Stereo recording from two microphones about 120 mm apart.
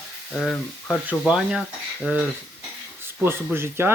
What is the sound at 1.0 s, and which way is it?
Speech, 10° right (ahead or behind).